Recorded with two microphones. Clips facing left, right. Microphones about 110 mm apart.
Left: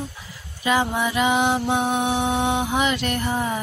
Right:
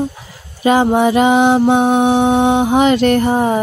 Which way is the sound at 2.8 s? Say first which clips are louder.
Right 12 dB; 70° right (ahead or behind).